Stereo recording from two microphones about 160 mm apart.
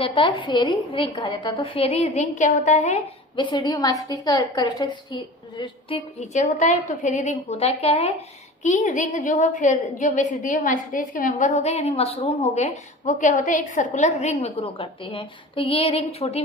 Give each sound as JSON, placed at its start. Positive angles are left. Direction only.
{"t": 0.0, "sound": "a woman's voice", "side_deg": 30}
{"t": 3.3, "sound": "a woman's voice", "side_deg": 30}
{"t": 5.6, "sound": "a woman's voice", "side_deg": 35}
{"t": 8.6, "sound": "a woman's voice", "side_deg": 50}